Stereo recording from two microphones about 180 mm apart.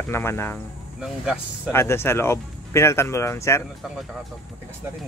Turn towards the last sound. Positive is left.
turn(degrees=15)  # may be behind; listen again after turning